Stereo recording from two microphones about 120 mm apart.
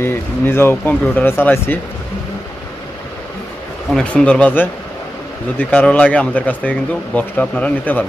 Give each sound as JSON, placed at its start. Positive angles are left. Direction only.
{"t": 0.0, "sound": "speech", "side_deg": 20}
{"t": 3.9, "sound": "speech", "side_deg": 10}